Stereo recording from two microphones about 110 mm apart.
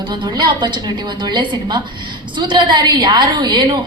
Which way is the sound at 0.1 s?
45° right (ahead or behind).